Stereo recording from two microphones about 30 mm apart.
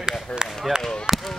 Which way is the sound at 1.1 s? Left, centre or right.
Right.